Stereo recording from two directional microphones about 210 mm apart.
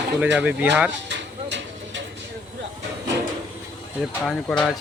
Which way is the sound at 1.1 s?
60° right (ahead or behind).